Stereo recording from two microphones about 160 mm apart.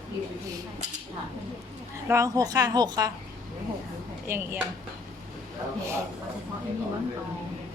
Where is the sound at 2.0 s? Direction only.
20° right (ahead or behind).